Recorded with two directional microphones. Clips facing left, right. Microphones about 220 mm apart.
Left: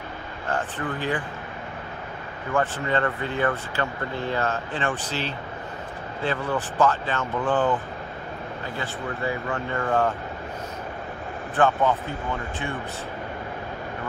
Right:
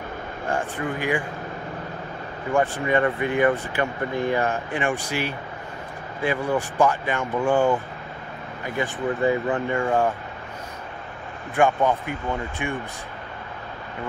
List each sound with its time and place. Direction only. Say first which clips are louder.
0.5 s speech: right 2 dB; 10° right (ahead or behind)
2.5 s speech: right 3 dB; 15° right (ahead or behind)
11.5 s speech: right 1 dB; 15° right (ahead or behind)